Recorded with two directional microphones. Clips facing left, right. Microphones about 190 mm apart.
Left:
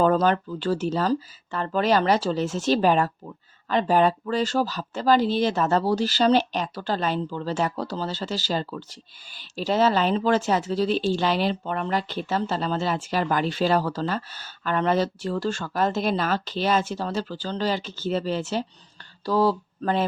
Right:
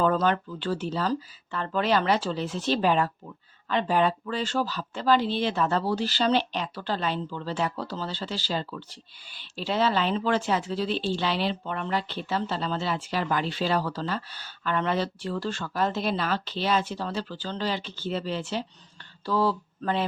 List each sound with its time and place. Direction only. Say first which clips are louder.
0.0 s speech: left 4 dB; 40° left (ahead or behind)